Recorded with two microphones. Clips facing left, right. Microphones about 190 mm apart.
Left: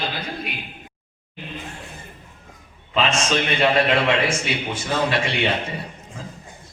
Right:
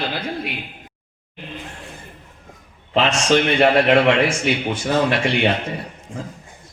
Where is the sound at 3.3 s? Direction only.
55° right (ahead or behind).